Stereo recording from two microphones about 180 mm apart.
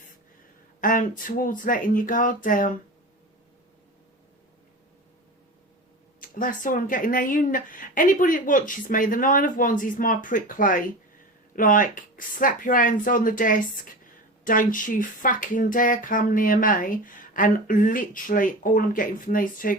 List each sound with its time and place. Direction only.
0.8 s speech: 50° left (ahead or behind)
6.1 s speech: 50° left (ahead or behind)